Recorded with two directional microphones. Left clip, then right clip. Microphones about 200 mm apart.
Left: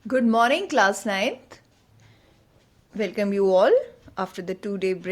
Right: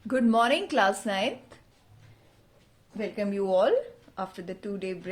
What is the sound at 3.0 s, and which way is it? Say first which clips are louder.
Speech: left 7 dB; 35° left (ahead or behind).